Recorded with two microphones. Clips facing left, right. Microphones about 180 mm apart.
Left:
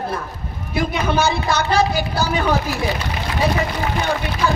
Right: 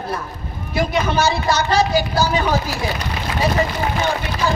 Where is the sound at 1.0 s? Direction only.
55° left (ahead or behind).